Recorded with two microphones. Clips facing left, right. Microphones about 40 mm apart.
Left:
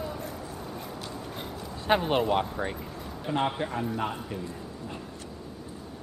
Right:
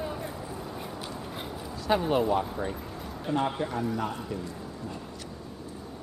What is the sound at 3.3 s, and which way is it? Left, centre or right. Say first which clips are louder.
Mantra: even; left.